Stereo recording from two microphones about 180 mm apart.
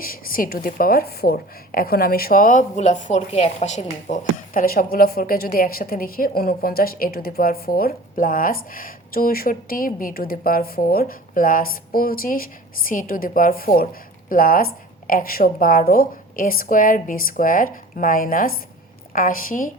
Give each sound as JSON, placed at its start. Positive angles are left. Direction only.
{"t": 0.0, "sound": "a woman's voice", "side_deg": 55}